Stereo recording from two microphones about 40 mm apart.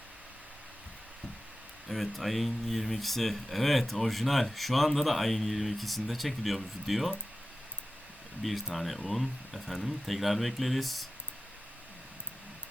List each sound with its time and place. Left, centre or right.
1.9 s speech: centre
8.4 s speech: centre